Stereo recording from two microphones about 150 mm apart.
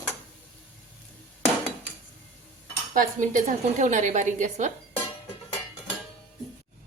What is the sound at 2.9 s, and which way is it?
A woman's voice, 60° right (ahead or behind).